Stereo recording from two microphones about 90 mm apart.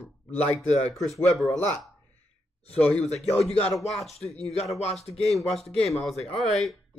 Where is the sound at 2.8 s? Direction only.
10° left (ahead or behind).